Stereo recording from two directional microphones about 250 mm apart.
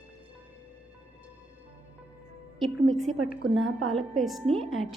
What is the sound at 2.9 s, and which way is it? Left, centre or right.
A woman's voice, centre.